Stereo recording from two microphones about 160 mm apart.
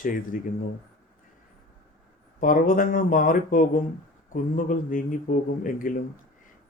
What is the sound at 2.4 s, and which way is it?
Speech, 60° left (ahead or behind).